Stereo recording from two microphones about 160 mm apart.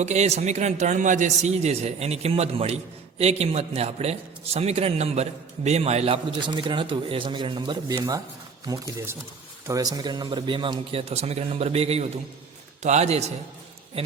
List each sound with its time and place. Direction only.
0.0 s a man's voice: 45° right (ahead or behind)